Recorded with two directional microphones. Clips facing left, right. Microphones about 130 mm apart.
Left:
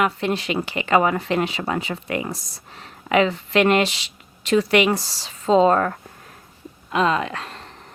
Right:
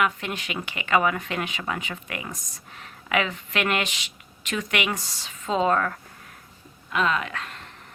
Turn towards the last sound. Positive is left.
turn(degrees=35)  # may be behind; listen again after turning